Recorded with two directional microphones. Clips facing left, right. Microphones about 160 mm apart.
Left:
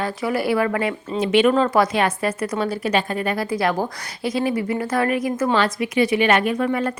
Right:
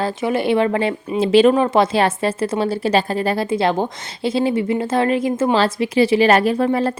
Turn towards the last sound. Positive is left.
turn(degrees=-30)  # may be behind; listen again after turning